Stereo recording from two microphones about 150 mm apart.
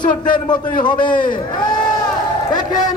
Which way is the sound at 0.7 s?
30° left (ahead or behind).